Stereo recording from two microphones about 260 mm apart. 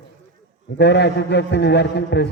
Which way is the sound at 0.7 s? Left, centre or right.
Left.